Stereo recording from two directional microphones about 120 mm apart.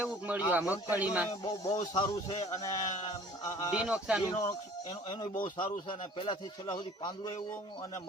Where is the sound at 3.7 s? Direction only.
5° right (ahead or behind).